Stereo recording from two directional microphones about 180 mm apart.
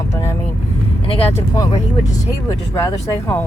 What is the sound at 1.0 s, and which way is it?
Speech, 30° left (ahead or behind).